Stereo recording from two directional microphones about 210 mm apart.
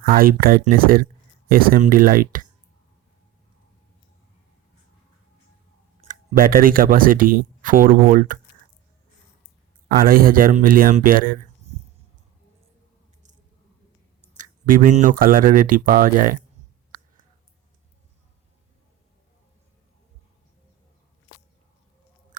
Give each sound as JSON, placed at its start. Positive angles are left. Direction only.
{"t": 0.0, "sound": "speech", "side_deg": -45}
{"t": 6.1, "sound": "speech", "side_deg": -45}
{"t": 10.0, "sound": "speech", "side_deg": -40}
{"t": 14.3, "sound": "speech", "side_deg": -35}